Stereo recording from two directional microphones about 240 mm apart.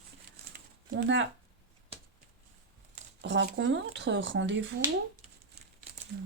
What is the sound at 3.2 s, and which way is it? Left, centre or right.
Speech, right.